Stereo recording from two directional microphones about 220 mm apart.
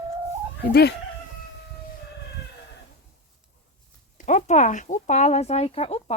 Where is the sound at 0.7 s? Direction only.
45° left (ahead or behind).